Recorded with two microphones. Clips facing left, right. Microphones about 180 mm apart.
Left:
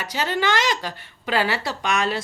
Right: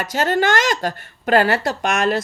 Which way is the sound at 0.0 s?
50° right (ahead or behind).